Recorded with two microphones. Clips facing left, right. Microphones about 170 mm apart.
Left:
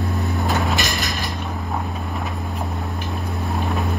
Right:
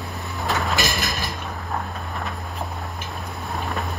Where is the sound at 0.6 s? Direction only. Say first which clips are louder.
Left 1 dB; centre (ahead or behind).